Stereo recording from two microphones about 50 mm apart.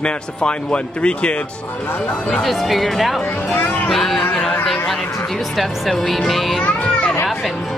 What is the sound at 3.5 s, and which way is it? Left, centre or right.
Speech, left.